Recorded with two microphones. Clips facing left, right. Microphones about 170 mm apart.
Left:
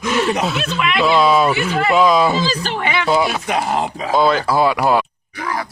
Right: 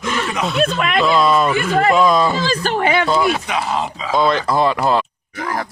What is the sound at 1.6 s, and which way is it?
Speech, 45° right (ahead or behind).